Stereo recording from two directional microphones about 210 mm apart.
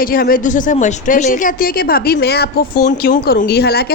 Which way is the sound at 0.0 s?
45° left (ahead or behind).